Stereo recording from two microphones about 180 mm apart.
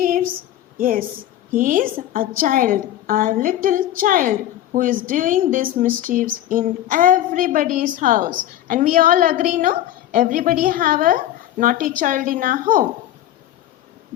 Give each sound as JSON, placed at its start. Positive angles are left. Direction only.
{"t": 0.8, "sound": "a woman's voice", "side_deg": -50}